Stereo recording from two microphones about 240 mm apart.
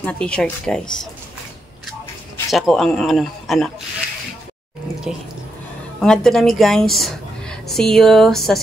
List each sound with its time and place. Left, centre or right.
0.0 s speech: centre
2.5 s speech: centre
5.1 s a woman's voice: centre